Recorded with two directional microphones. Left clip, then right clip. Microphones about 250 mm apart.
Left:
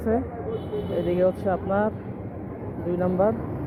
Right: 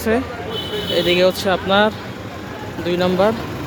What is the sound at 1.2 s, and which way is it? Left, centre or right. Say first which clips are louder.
Speech: right 7 dB; right.